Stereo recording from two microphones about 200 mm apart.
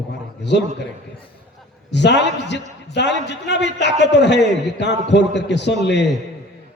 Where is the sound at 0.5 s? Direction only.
60° left (ahead or behind).